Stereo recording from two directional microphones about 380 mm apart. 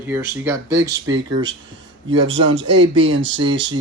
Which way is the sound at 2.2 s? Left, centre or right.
Right.